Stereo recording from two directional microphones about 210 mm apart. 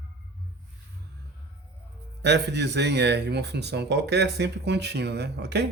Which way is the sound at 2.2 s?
55° right (ahead or behind).